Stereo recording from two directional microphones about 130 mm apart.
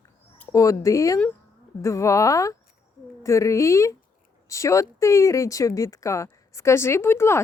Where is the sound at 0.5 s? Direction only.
25° left (ahead or behind).